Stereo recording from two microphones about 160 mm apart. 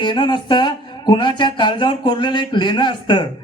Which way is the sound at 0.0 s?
30° left (ahead or behind).